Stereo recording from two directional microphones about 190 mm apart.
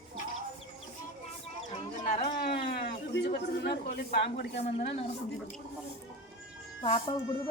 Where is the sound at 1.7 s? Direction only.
35° left (ahead or behind).